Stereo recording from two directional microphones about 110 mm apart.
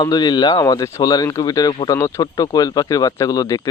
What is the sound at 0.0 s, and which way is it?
Speech, 35° left (ahead or behind).